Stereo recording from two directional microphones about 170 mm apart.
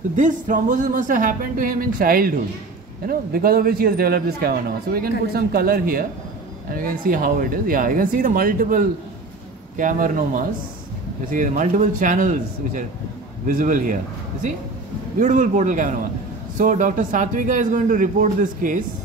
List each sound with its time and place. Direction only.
0.1 s speech: 45° right (ahead or behind)
15.1 s speech: 45° right (ahead or behind)